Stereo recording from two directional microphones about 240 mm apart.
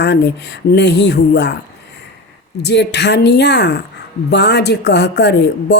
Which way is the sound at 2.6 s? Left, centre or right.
Left.